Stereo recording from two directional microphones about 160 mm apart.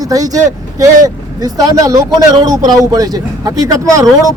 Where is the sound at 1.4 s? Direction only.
20° right (ahead or behind).